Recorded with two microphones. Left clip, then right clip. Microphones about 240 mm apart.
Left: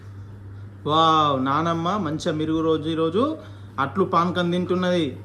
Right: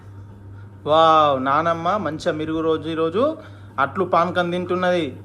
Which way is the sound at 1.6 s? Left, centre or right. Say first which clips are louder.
Right 4 dB; centre.